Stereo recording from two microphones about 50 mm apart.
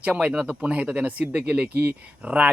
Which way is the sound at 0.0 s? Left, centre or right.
Right.